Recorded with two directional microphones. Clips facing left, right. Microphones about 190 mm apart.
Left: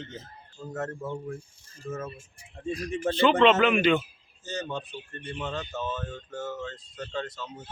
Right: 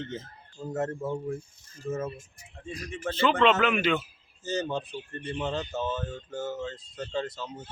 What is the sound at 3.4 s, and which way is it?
Speech, centre (ahead or behind).